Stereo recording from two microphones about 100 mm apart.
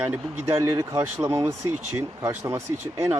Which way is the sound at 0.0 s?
25° right (ahead or behind).